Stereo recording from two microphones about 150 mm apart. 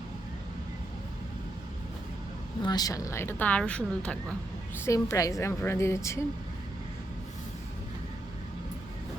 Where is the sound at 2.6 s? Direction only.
25° left (ahead or behind); by 4.3 s 5° left (ahead or behind).